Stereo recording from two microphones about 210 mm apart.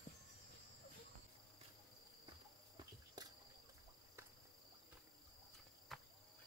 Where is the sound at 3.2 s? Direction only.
20° right (ahead or behind).